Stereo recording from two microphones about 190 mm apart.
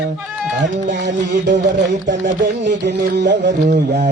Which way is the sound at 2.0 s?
70° right (ahead or behind).